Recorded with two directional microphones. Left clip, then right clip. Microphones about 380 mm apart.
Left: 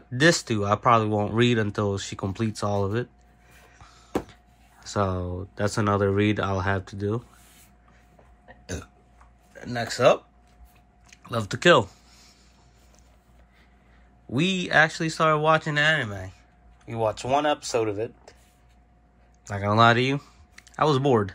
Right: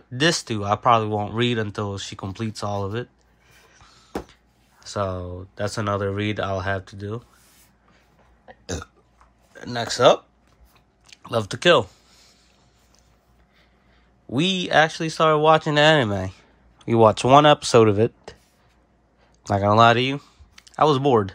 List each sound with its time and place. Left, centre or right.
0.1 s speech: centre
9.5 s speech: centre
11.1 s a sound: centre
14.3 s speech: centre
19.4 s speech: centre